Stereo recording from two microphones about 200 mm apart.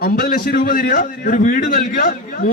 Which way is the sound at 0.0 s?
45° left (ahead or behind).